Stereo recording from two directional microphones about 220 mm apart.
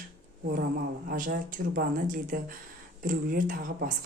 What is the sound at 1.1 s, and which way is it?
Speech, 40° right (ahead or behind).